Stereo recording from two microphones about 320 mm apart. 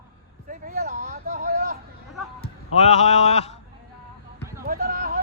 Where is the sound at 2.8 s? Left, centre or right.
Left.